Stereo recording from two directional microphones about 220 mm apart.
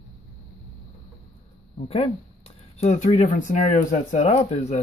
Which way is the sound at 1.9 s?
25° left (ahead or behind).